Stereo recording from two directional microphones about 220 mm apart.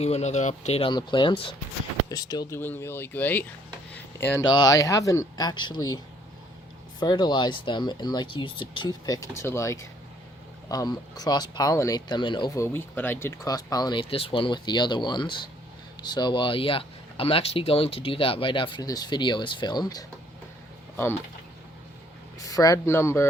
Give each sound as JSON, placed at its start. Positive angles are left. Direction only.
{"t": 0.0, "sound": "speech", "side_deg": 30}
{"t": 7.0, "sound": "speech", "side_deg": 20}
{"t": 22.4, "sound": "speech", "side_deg": 15}